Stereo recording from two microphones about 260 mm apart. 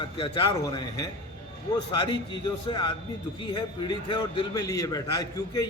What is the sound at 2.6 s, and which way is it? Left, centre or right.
A man's voice, centre.